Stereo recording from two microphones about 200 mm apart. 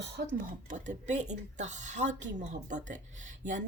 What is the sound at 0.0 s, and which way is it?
Speech, 55° right (ahead or behind).